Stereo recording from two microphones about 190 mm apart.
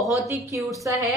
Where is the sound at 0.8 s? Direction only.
10° right (ahead or behind).